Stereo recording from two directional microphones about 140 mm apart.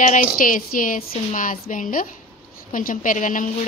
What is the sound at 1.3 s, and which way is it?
Speech, 70° left (ahead or behind).